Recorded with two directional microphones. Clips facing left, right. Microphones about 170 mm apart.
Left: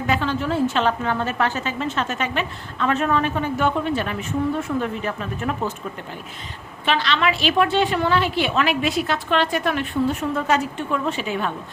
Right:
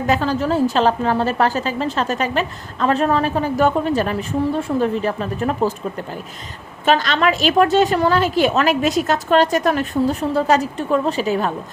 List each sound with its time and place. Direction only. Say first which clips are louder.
0.1 s a woman's voice: right 4 dB; 40° right (ahead or behind)
6.8 s a woman's voice: right 5 dB; 45° right (ahead or behind)